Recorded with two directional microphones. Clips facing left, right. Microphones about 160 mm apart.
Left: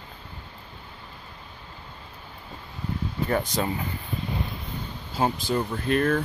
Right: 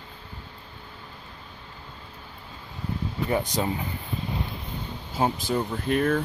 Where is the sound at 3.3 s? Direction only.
15° right (ahead or behind).